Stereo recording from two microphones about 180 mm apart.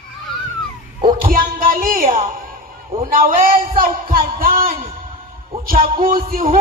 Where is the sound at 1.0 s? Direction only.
50° right (ahead or behind).